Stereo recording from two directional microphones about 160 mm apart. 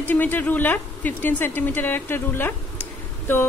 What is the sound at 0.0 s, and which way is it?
A woman's voice, 10° left (ahead or behind).